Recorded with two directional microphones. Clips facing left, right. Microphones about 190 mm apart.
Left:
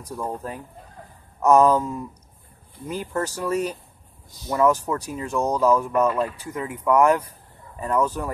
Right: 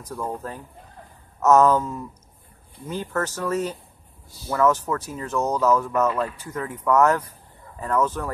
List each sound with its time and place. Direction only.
0.0 s speech: 15° left (ahead or behind)